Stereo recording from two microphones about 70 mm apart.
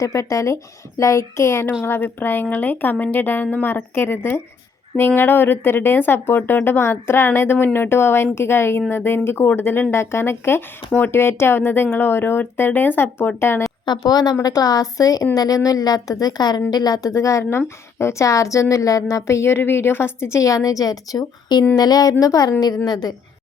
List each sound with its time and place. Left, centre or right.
0.0 s a woman's voice: left
1.8 s speech: left
13.8 s a woman's voice: left
14.4 s a woman's voice: left
22.9 s a woman's voice: left